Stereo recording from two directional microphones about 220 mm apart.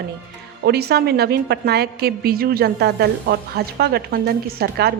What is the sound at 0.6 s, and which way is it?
A woman's voice, 45° right (ahead or behind).